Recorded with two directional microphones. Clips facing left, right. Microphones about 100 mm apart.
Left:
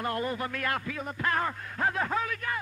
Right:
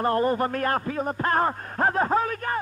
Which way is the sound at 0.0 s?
40° right (ahead or behind).